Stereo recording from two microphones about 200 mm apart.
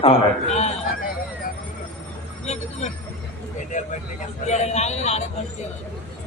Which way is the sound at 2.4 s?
35° left (ahead or behind).